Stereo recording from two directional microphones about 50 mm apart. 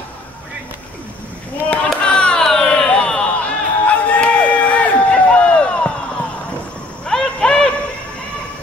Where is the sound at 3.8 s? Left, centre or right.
Left.